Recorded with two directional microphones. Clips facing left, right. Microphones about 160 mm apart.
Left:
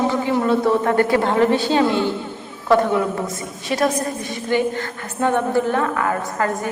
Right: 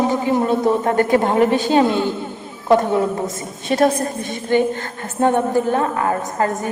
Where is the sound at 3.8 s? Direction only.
25° right (ahead or behind).